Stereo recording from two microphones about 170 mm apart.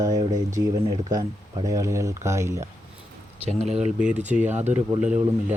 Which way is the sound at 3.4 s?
40° right (ahead or behind).